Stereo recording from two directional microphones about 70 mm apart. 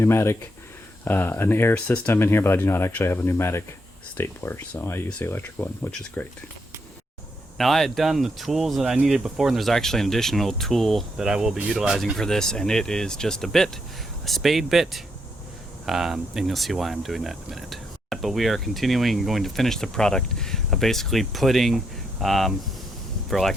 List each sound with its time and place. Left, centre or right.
0.0 s speech: left
1.7 s speech: centre
2.1 s speech: left
6.2 s speech: left
7.6 s speech: centre
11.2 s speech: centre
12.1 s speech: centre